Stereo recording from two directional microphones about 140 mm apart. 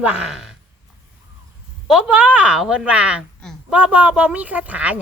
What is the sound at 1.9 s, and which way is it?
A woman's voice, 5° right (ahead or behind).